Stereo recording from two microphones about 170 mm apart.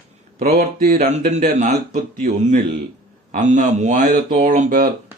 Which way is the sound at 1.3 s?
45° right (ahead or behind).